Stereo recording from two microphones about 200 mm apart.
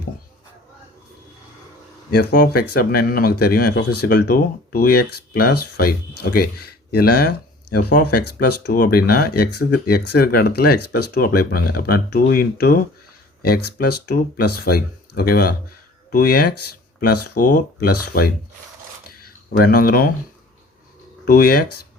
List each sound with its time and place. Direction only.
2.0 s speech: 50° left (ahead or behind)
19.5 s speech: 50° left (ahead or behind)
21.2 s speech: 50° left (ahead or behind)